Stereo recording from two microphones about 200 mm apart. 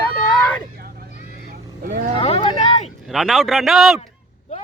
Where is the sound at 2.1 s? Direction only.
30° left (ahead or behind).